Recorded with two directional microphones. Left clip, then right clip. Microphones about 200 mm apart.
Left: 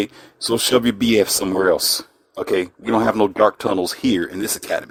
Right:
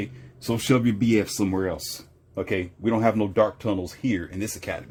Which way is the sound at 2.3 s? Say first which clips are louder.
Left 7 dB; 45° left (ahead or behind).